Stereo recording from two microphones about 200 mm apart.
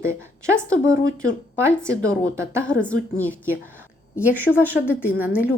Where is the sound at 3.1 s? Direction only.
10° right (ahead or behind).